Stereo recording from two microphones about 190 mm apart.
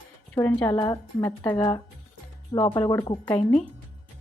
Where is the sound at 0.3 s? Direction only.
10° left (ahead or behind).